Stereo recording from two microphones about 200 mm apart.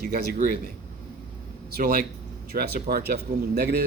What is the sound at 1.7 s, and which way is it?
Speech, 45° right (ahead or behind).